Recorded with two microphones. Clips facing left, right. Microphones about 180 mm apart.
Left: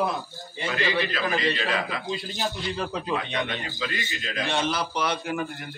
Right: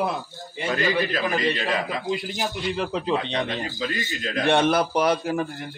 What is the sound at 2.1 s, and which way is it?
A man's voice, 15° right (ahead or behind).